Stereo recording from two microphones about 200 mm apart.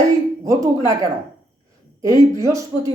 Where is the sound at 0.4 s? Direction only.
15° right (ahead or behind).